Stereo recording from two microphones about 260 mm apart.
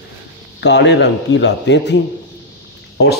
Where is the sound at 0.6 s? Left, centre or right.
Left.